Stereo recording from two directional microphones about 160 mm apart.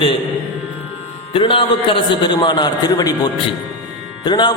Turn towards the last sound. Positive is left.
turn(degrees=30)  # may be behind; listen again after turning